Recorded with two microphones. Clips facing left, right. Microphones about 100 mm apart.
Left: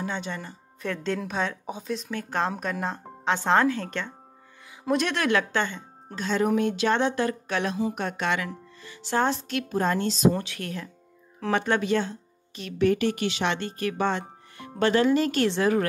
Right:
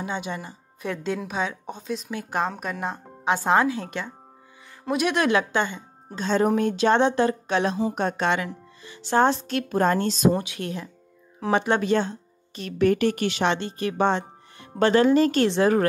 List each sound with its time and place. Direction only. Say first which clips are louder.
0.0 s speech: right 2 dB; 15° right (ahead or behind); by 2.0 s centre (ahead or behind)
2.0 s speech: right 2 dB; 15° right (ahead or behind)
2.4 s speech: even; centre (ahead or behind)
6.1 s a woman's voice: right 2 dB; 30° right (ahead or behind)
9.7 s a woman's voice: right 4 dB; 50° right (ahead or behind)
10.3 s speech: right 4 dB; 20° right (ahead or behind)
11.8 s speech: right 3 dB; 30° right (ahead or behind)
12.6 s speech: right 2 dB; 50° right (ahead or behind)
13.5 s speech: right 3 dB; 20° right (ahead or behind)